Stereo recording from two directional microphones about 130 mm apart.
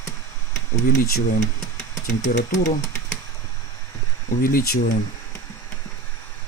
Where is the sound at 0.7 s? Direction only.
70° left (ahead or behind).